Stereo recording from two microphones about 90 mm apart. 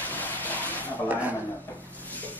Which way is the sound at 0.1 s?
20° left (ahead or behind).